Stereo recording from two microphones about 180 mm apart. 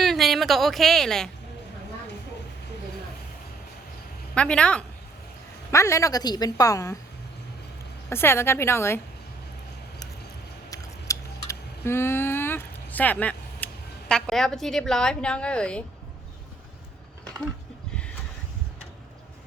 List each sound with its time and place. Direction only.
0.0 s a woman's voice: centre (ahead or behind)
4.4 s a woman's voice: 5° left (ahead or behind)
5.7 s a woman's voice: 15° left (ahead or behind)
8.1 s a woman's voice: 15° left (ahead or behind)
10.7 s a sound: 15° left (ahead or behind)
14.1 s a woman's voice: centre (ahead or behind)